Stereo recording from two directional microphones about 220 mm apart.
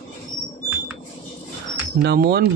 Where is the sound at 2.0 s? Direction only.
45° right (ahead or behind).